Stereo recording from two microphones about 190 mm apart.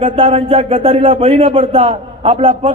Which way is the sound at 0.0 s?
30° right (ahead or behind).